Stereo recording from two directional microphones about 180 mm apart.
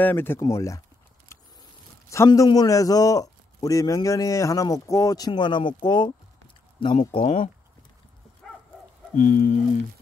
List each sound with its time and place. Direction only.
0.0 s speech: 10° left (ahead or behind)
2.0 s a man's voice: 15° left (ahead or behind); by 7.5 s 35° left (ahead or behind)
9.1 s a sound: 50° left (ahead or behind)